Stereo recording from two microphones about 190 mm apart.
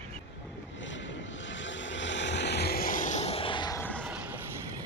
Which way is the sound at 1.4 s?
75° left (ahead or behind).